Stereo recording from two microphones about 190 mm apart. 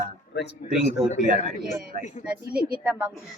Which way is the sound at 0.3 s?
65° left (ahead or behind).